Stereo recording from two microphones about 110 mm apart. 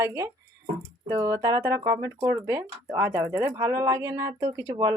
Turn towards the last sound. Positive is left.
turn(degrees=-35)  # may be behind; listen again after turning